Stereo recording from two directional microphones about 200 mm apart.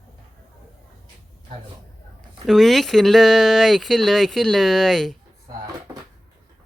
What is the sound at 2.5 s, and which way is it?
Speech, centre (ahead or behind).